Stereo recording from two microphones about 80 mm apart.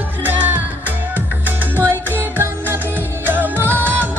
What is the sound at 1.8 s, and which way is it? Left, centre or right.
Music, right.